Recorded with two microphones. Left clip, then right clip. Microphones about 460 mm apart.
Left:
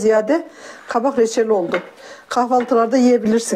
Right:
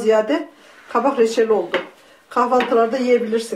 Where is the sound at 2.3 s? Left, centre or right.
Left.